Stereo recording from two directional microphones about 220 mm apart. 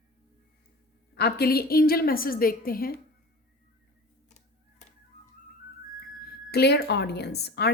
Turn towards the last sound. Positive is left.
turn(degrees=50)  # may be behind; listen again after turning